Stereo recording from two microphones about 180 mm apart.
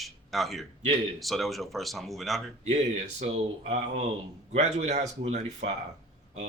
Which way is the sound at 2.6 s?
35° right (ahead or behind).